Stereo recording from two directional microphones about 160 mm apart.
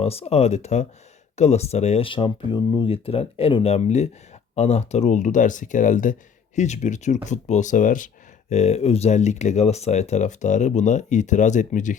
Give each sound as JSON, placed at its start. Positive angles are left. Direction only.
{"t": 0.0, "sound": "speech", "side_deg": 40}